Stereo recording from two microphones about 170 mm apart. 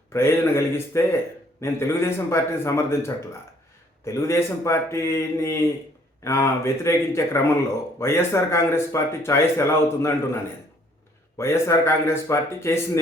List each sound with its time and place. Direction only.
0.1 s speech: 15° left (ahead or behind)
11.3 s speech: 15° left (ahead or behind)